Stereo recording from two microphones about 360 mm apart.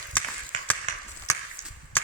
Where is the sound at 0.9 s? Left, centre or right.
Centre.